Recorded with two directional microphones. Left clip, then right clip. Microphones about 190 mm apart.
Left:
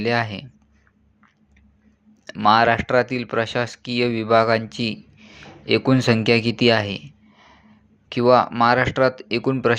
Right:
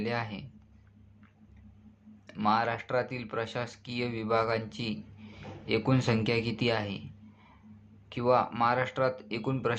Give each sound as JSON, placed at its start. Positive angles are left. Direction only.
{"t": 0.0, "sound": "speech", "side_deg": 35}
{"t": 2.3, "sound": "speech", "side_deg": 35}